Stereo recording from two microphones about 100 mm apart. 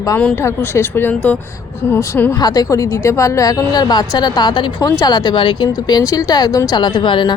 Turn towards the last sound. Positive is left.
turn(degrees=50)  # may be behind; listen again after turning